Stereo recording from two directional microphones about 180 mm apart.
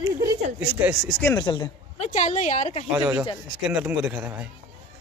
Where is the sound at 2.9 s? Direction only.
5° right (ahead or behind).